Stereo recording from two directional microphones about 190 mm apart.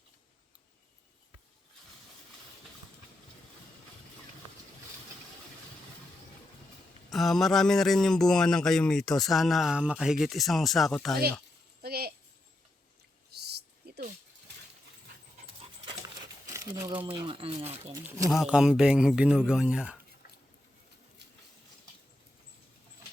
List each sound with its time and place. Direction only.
7.1 s a man's voice: centre (ahead or behind)
11.8 s a sound: 55° right (ahead or behind)
13.9 s a sound: 60° right (ahead or behind)
15.6 s dog: 25° right (ahead or behind)
16.9 s speech: 25° right (ahead or behind)
18.3 s a man's voice: 5° right (ahead or behind)